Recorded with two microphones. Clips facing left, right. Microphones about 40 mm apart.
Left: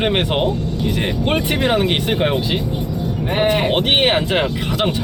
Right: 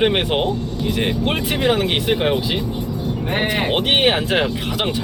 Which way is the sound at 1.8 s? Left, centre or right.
Centre.